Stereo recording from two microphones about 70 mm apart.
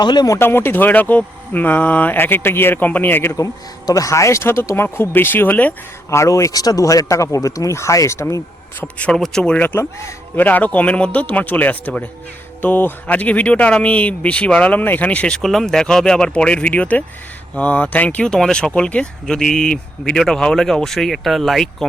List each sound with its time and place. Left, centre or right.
0.0 s speech: left
0.3 s speech: left
3.3 s speech: left
6.1 s speech: left
9.1 s speech: centre
9.6 s speech: left
15.4 s speech: centre
18.7 s speech: centre